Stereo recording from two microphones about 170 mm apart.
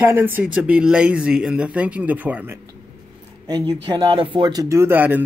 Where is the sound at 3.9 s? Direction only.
25° right (ahead or behind).